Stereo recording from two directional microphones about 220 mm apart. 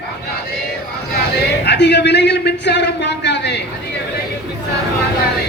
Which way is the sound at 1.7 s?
50° left (ahead or behind).